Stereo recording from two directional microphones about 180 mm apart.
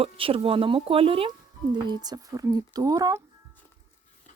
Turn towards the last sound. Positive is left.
turn(degrees=-20)  # may be behind; listen again after turning